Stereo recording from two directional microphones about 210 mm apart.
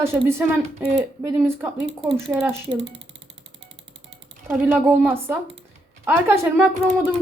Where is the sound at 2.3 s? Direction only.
5° right (ahead or behind).